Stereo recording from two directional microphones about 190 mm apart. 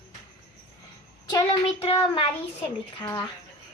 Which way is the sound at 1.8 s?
30° left (ahead or behind).